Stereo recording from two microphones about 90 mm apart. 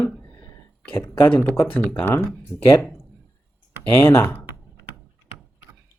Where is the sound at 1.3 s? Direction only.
15° left (ahead or behind).